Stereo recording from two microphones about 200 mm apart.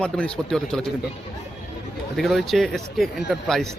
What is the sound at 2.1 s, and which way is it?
Speech, centre (ahead or behind).